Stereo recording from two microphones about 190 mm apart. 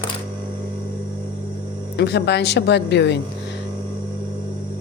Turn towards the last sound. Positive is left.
turn(degrees=65)  # may be behind; listen again after turning